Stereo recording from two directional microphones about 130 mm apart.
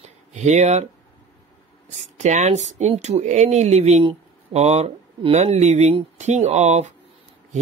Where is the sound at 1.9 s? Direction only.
65° right (ahead or behind).